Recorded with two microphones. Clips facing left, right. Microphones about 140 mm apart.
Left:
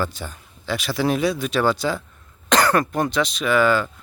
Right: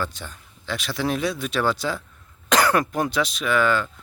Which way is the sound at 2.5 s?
10° right (ahead or behind).